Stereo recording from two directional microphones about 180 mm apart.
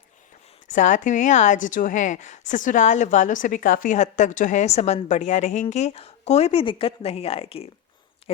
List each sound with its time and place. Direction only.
0.7 s a woman's voice: 45° left (ahead or behind)